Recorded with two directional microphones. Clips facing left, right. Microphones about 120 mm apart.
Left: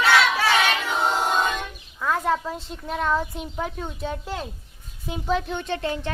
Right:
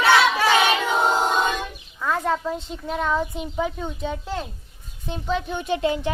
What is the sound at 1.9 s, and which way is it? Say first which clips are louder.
A woman's voice: even; centre (ahead or behind).